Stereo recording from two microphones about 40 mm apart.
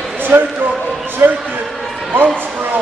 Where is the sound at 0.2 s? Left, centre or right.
Right.